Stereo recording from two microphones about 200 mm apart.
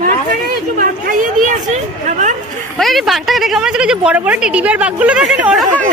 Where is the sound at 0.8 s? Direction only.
45° right (ahead or behind).